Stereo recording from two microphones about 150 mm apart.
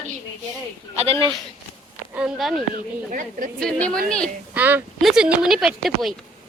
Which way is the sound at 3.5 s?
5° left (ahead or behind).